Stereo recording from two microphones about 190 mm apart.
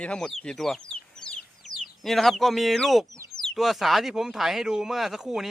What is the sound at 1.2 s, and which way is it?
Chicken, centre (ahead or behind).